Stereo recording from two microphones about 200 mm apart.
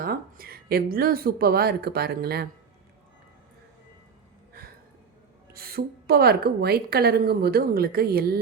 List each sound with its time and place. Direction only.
0.0 s a woman's voice: 50° right (ahead or behind)
5.5 s a woman's voice: 50° right (ahead or behind)